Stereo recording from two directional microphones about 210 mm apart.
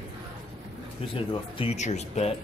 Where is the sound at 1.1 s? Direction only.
25° left (ahead or behind).